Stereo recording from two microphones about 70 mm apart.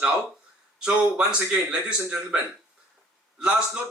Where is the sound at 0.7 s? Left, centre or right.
Centre.